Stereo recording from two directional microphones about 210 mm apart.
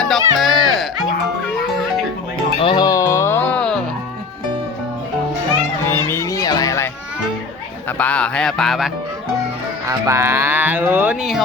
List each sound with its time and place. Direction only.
0.0 s music: centre (ahead or behind)
2.6 s music: 20° left (ahead or behind); by 3.8 s 5° left (ahead or behind)
6.1 s a sound: 15° left (ahead or behind)
7.9 s speech: 5° left (ahead or behind)
9.8 s speech: 15° right (ahead or behind)